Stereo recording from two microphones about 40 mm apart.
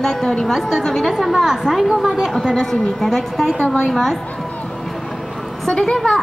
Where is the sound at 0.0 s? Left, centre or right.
Centre.